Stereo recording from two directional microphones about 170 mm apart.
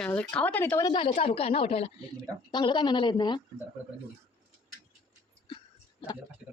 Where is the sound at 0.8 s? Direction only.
30° left (ahead or behind).